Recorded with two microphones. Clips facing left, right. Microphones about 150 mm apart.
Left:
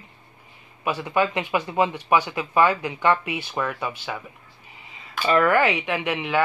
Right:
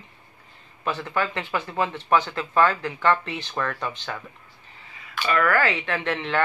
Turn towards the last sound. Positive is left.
turn(degrees=10)  # may be behind; listen again after turning